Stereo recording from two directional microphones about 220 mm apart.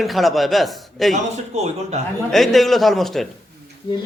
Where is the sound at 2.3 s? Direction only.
Centre (ahead or behind).